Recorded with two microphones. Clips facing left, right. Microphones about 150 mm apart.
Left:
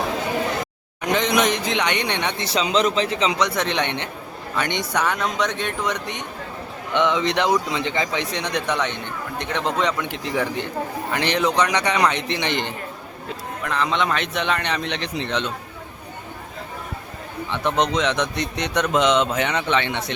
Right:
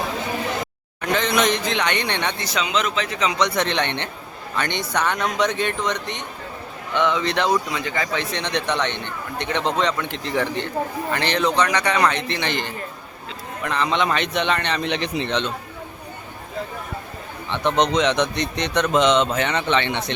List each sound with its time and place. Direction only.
1.0 s a man's voice: 15° left (ahead or behind)
2.4 s speech: 30° left (ahead or behind)
3.3 s speech: 5° left (ahead or behind)
5.0 s a man's voice: centre (ahead or behind)
5.8 s speech: 10° left (ahead or behind)
13.7 s a man's voice: centre (ahead or behind)
14.8 s a man's voice: 5° right (ahead or behind)
17.5 s speech: 5° left (ahead or behind)